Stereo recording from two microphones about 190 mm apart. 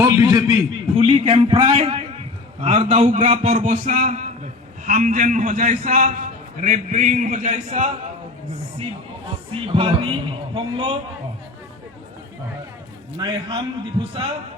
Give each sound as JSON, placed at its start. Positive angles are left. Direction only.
{"t": 0.0, "sound": "a sound", "side_deg": -15}
{"t": 0.9, "sound": "a man's voice", "side_deg": -30}
{"t": 9.5, "sound": "a man's voice", "side_deg": -30}
{"t": 13.1, "sound": "a man's voice", "side_deg": -25}